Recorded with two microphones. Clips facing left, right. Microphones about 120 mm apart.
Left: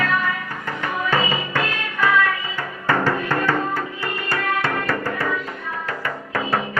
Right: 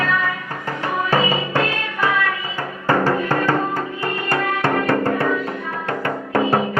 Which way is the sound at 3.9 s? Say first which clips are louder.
Right 4 dB; 50° right (ahead or behind).